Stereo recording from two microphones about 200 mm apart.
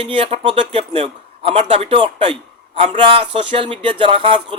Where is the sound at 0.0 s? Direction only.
30° right (ahead or behind).